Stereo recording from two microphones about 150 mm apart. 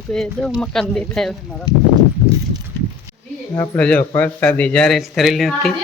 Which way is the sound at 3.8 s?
10° left (ahead or behind).